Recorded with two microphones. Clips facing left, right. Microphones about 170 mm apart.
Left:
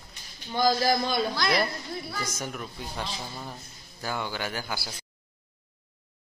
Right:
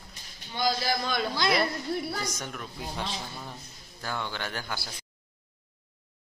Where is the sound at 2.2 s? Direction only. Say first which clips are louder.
Left 1 dB; 5° left (ahead or behind).